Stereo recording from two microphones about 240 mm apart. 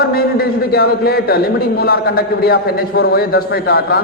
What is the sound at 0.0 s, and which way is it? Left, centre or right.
A man's voice, left.